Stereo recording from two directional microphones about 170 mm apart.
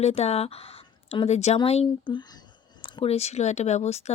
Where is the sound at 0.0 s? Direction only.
40° left (ahead or behind).